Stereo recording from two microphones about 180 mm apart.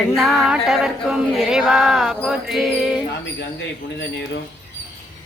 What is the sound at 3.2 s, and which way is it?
Speech, 80° left.